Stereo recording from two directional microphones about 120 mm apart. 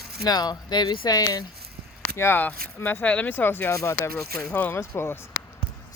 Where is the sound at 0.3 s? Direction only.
35° left (ahead or behind).